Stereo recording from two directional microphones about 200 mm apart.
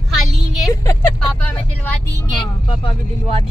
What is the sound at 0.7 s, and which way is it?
Speech, 15° left (ahead or behind).